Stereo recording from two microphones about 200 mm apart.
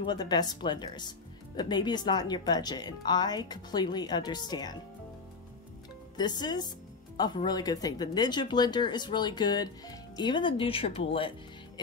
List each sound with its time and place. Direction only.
0.0 s speech: 20° left (ahead or behind)
6.1 s speech: 20° left (ahead or behind)